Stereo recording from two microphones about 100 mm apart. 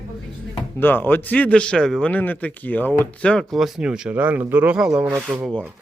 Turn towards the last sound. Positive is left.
turn(degrees=-20)  # may be behind; listen again after turning